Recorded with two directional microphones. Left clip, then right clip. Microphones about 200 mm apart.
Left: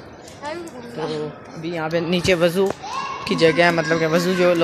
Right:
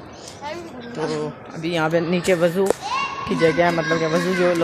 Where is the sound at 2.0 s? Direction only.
5° left (ahead or behind).